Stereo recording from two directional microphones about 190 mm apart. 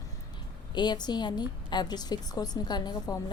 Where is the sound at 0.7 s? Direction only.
25° left (ahead or behind).